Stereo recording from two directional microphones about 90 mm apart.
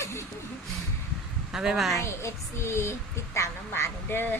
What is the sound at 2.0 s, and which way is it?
A child's voice, 30° left (ahead or behind).